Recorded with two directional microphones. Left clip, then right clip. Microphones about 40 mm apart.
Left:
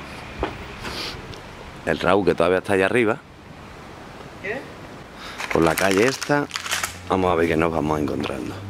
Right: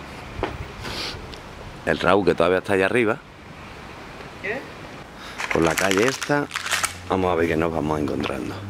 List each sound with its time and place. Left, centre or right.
0.4 s a sound: centre
1.9 s speech: centre
4.4 s speech: centre
5.4 s speech: centre